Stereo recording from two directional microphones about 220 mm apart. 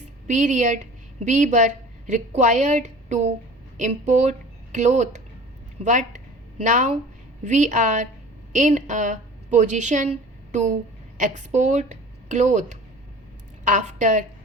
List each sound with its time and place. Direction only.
0.3 s a woman's voice: 35° right (ahead or behind)